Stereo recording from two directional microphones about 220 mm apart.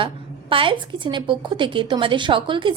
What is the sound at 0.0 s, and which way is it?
A woman's voice, 25° right (ahead or behind).